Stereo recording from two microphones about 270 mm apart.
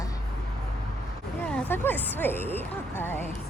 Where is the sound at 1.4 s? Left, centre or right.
Centre.